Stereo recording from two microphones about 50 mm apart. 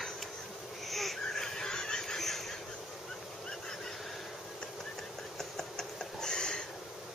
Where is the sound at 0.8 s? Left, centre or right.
Centre.